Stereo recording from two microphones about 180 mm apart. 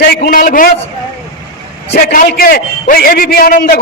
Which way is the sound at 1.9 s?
60° left (ahead or behind).